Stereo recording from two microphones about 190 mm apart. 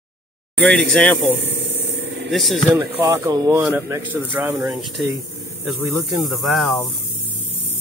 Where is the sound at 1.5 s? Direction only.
65° right (ahead or behind).